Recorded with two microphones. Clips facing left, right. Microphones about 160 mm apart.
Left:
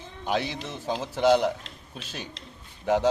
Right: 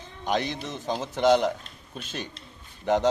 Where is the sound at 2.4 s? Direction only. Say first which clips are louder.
Left 2 dB; 90° left.